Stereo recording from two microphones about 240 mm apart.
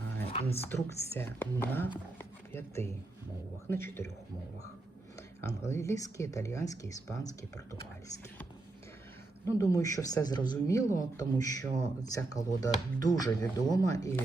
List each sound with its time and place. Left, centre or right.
0.3 s speech: left
0.6 s speech: centre
2.1 s a sound: centre
3.7 s speech: centre
5.4 s speech: centre
9.5 s speech: centre